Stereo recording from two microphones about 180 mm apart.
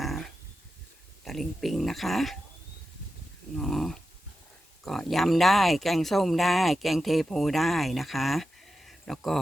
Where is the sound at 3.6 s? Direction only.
Centre (ahead or behind).